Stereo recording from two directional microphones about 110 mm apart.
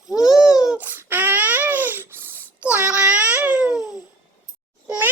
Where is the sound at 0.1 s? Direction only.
5° right (ahead or behind).